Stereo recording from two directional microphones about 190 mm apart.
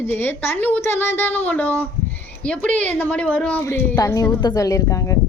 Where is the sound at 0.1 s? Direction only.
10° left (ahead or behind).